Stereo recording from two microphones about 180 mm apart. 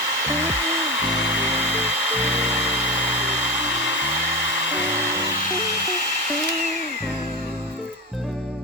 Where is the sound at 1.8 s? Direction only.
40° right (ahead or behind).